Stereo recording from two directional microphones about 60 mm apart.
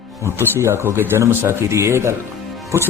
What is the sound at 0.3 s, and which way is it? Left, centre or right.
Speech, right.